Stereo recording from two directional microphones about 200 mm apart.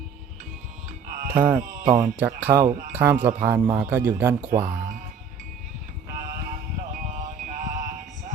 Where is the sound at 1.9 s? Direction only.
15° right (ahead or behind).